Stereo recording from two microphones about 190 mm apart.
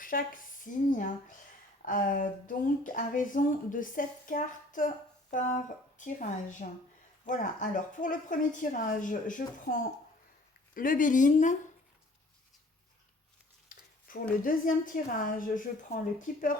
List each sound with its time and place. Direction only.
0.0 s a woman's voice: 45° left (ahead or behind)
13.7 s a sound: 45° left (ahead or behind)
14.1 s speech: 45° left (ahead or behind)